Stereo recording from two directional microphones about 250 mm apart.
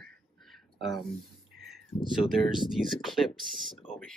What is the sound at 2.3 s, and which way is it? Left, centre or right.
Speech, centre.